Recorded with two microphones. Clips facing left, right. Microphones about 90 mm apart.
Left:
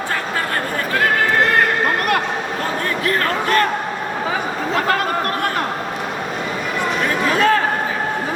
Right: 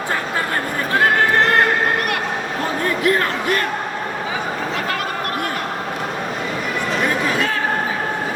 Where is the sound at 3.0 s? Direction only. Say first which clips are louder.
Even; 20° right (ahead or behind).